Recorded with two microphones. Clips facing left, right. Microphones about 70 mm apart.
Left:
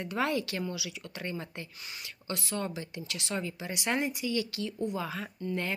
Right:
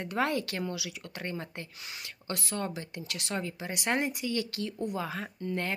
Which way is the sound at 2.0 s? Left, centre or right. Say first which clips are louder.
Even; right.